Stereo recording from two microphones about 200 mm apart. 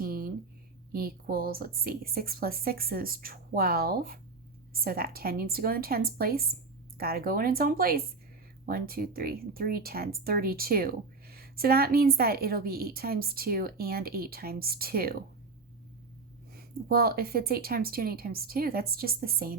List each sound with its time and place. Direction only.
0.0 s a sound: 50° right (ahead or behind)
0.9 s speech: 50° right (ahead or behind)
16.6 s speech: 50° right (ahead or behind)